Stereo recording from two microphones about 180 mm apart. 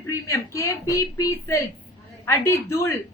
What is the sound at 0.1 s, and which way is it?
A woman's voice, 15° left (ahead or behind).